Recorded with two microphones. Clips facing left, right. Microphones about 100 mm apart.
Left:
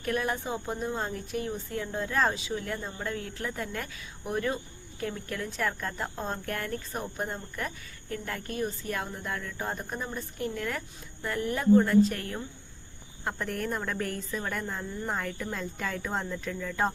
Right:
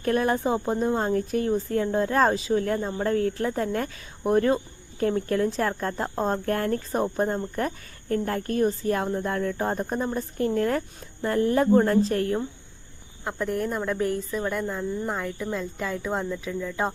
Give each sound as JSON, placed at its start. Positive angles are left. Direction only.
{"t": 0.0, "sound": "speech", "side_deg": -35}
{"t": 12.1, "sound": "speech", "side_deg": -25}
{"t": 13.2, "sound": "a woman's voice", "side_deg": 0}